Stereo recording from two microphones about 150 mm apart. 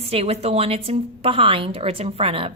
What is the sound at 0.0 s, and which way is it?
A woman's voice, 40° right (ahead or behind).